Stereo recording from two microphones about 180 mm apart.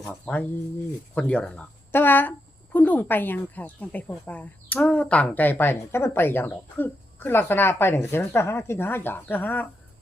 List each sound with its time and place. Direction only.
0.0 s speech: 10° left (ahead or behind)